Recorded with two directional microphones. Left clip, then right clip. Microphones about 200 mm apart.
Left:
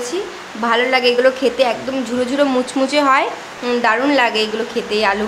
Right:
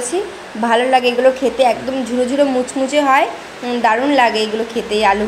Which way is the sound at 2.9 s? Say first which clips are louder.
Right 2 dB; 5° left (ahead or behind).